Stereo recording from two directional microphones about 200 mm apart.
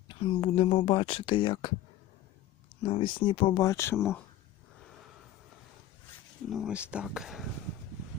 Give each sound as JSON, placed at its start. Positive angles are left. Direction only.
{"t": 0.1, "sound": "speech", "side_deg": 25}
{"t": 2.8, "sound": "speech", "side_deg": 25}
{"t": 6.5, "sound": "speech", "side_deg": -5}